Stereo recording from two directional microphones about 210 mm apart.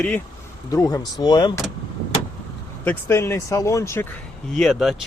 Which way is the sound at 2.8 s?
10° left (ahead or behind).